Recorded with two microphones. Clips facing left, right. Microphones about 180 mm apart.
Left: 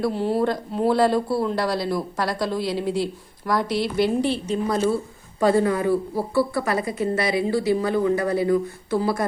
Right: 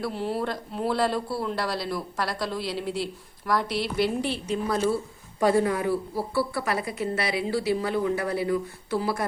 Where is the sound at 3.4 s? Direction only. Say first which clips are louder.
Left 4 dB; 5° right (ahead or behind).